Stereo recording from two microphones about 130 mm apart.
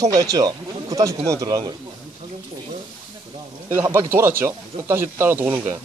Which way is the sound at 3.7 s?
15° right (ahead or behind).